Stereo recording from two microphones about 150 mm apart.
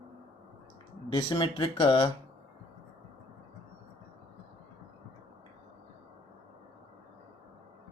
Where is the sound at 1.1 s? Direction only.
25° left (ahead or behind).